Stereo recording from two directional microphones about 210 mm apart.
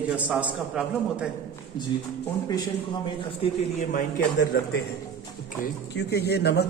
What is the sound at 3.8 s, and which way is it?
Speech, 40° left (ahead or behind).